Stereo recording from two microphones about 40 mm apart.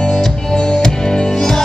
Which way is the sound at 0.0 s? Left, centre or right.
Centre.